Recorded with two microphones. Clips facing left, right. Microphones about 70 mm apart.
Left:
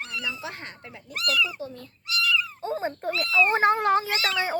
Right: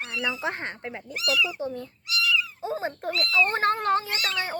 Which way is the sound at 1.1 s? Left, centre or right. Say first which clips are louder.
Even; left.